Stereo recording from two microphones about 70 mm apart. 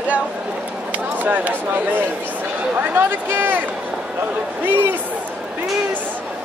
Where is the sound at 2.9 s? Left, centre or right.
Right.